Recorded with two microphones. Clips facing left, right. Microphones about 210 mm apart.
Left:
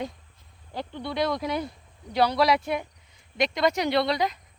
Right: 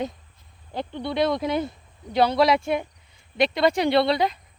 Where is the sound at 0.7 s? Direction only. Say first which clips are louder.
Right 4 dB; 25° right (ahead or behind).